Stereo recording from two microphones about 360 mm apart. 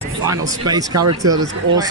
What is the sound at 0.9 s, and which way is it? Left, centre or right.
Speech, right.